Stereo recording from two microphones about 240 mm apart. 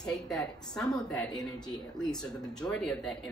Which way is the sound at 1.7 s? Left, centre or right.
Centre.